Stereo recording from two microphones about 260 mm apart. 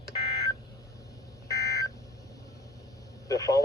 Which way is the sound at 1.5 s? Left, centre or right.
Centre.